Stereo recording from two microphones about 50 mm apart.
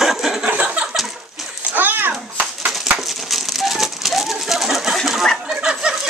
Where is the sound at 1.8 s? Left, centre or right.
Right.